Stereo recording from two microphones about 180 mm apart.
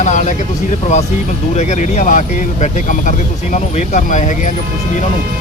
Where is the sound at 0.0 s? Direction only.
40° left (ahead or behind).